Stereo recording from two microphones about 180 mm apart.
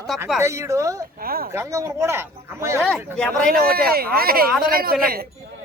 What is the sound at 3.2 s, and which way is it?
Speech, 5° left (ahead or behind).